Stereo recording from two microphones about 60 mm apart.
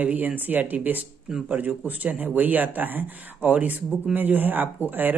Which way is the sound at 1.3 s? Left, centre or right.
Centre.